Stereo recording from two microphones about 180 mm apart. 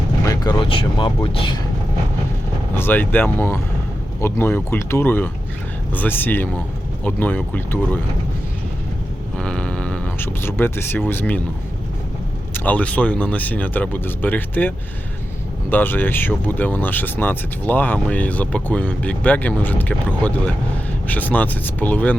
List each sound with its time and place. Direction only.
0.3 s speech: 25° left (ahead or behind)
2.7 s speech: 10° left (ahead or behind)
9.4 s a sound: 5° left (ahead or behind)
12.5 s speech: 10° left (ahead or behind)
15.7 s speech: 10° left (ahead or behind)